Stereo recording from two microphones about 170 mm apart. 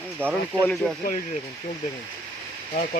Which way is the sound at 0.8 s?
Centre (ahead or behind).